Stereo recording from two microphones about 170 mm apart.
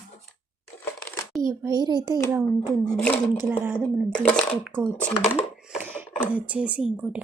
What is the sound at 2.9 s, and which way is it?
Speech, 5° left (ahead or behind).